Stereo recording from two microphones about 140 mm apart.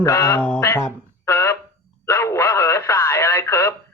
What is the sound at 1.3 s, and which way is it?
Fire alarm, 20° left (ahead or behind).